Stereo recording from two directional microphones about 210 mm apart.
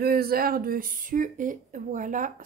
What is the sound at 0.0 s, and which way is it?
Speech, 45° right (ahead or behind).